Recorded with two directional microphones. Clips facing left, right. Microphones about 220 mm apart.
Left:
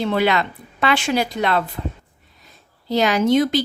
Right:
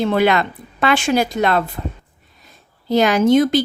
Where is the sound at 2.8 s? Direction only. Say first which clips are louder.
Right 3 dB; 50° right (ahead or behind).